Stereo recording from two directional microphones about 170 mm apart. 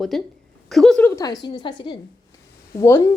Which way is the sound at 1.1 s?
20° left (ahead or behind).